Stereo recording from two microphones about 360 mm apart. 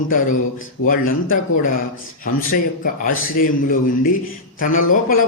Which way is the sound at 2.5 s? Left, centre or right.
Left.